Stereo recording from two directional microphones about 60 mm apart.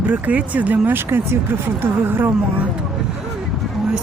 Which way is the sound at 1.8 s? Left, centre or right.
Right.